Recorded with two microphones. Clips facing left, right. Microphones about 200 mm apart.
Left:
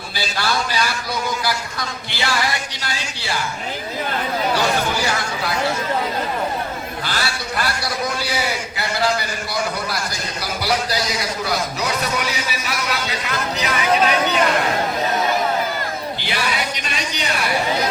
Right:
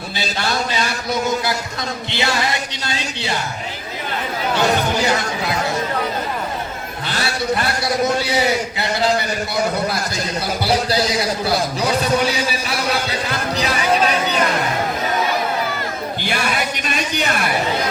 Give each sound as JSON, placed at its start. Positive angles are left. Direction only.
{"t": 0.3, "sound": "a man's voice", "side_deg": -25}
{"t": 2.0, "sound": "music", "side_deg": -25}
{"t": 7.1, "sound": "a man's voice", "side_deg": -25}
{"t": 10.6, "sound": "a man's voice", "side_deg": -30}
{"t": 16.2, "sound": "a sound", "side_deg": -50}